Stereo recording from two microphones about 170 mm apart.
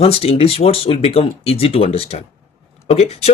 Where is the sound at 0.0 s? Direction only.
35° left (ahead or behind).